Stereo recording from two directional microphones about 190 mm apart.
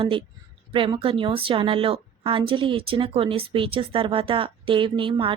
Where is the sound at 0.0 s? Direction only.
30° right (ahead or behind).